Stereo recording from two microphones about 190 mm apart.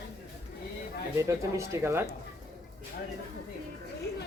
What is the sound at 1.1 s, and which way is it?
Speech, 15° right (ahead or behind).